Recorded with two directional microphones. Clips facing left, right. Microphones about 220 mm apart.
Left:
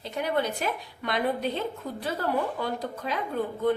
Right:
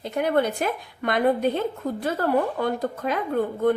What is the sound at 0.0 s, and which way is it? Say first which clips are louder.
A woman's voice: right 6 dB; 55° right (ahead or behind).